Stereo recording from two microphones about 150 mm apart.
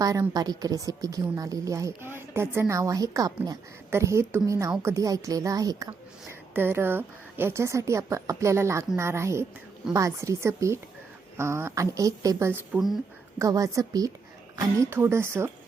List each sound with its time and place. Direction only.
0.0 s a woman's voice: 25° right (ahead or behind)